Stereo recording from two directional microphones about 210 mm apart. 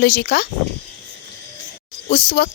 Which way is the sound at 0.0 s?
50° left (ahead or behind).